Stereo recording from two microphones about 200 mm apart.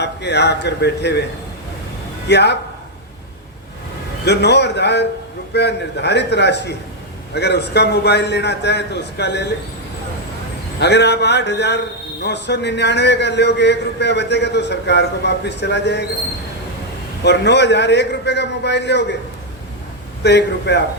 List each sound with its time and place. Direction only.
0.0 s a man's voice: 60° left (ahead or behind)
2.2 s a man's voice: 60° left (ahead or behind)
4.3 s a man's voice: 55° left (ahead or behind)
10.8 s a man's voice: 55° left (ahead or behind)
17.2 s a man's voice: 55° left (ahead or behind)
20.2 s a man's voice: 60° left (ahead or behind)